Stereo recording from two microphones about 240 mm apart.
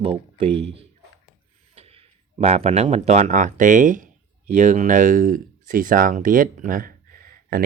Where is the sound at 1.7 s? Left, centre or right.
Right.